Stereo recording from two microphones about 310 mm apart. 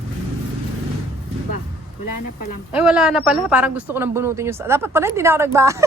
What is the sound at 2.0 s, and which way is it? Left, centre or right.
Speech, left.